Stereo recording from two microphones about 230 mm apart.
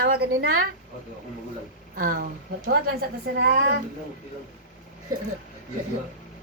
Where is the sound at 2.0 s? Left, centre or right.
Right.